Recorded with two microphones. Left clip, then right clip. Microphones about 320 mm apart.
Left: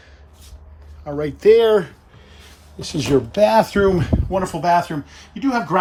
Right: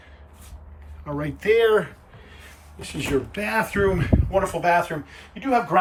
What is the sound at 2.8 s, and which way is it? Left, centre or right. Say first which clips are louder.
Speech: left 7 dB; left.